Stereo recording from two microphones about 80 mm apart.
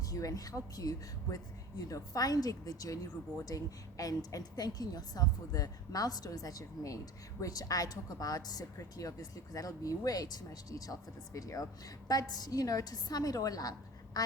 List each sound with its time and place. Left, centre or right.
0.0 s a woman's voice: left